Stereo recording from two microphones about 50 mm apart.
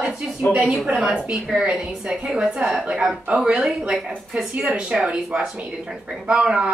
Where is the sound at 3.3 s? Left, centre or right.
Right.